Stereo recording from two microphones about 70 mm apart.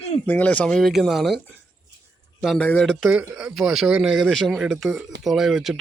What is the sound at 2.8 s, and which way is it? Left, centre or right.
Speech, centre.